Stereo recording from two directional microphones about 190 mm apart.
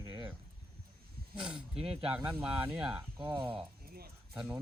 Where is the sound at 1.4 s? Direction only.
5° right (ahead or behind).